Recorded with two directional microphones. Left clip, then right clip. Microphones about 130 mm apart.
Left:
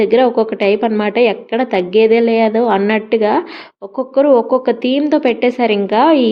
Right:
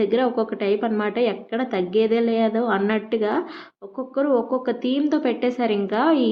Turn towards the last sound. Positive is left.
turn(degrees=15)  # may be behind; listen again after turning